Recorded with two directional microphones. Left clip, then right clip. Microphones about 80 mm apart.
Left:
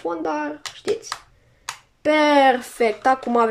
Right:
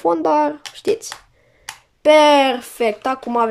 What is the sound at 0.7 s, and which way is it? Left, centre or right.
Speech, right.